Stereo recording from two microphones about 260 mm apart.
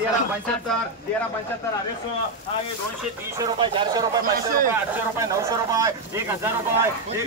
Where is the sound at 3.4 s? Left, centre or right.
Centre.